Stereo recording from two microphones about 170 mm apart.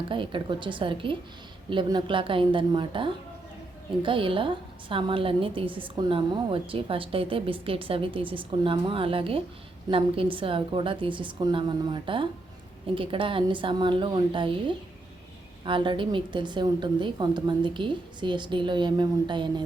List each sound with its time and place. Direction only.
0.1 s a woman's voice: 30° right (ahead or behind)
15.6 s a woman's voice: 30° right (ahead or behind)